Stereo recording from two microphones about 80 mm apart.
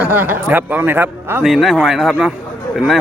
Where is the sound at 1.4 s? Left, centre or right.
Centre.